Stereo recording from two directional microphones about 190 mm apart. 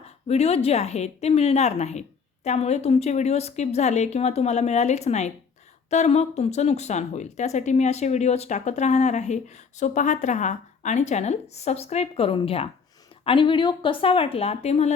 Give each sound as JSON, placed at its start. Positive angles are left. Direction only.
{"t": 0.3, "sound": "a woman's voice", "side_deg": 30}